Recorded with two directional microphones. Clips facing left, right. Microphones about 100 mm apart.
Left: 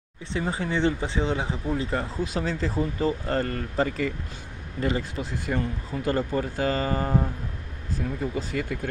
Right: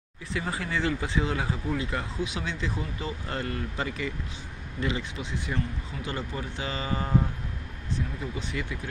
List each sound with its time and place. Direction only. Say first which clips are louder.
0.3 s speech: left 3 dB; 30° left (ahead or behind)
8.2 s speech: left 5 dB; 45° left (ahead or behind)